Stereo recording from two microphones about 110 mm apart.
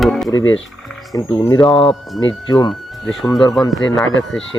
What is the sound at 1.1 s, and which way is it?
Speech, 30° left (ahead or behind).